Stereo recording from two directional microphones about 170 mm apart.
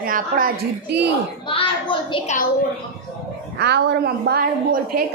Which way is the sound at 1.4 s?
30° left (ahead or behind).